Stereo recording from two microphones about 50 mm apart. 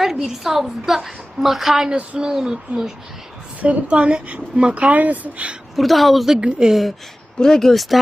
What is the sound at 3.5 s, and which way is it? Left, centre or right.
Speech, right.